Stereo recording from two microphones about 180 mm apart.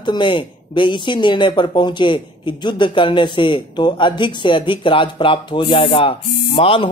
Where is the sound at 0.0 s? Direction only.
25° left (ahead or behind).